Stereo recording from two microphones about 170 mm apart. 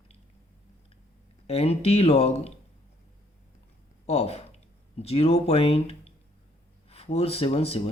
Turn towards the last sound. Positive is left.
turn(degrees=35)  # may be behind; listen again after turning